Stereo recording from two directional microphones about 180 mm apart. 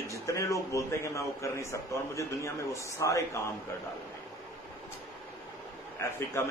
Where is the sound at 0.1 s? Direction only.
15° left (ahead or behind).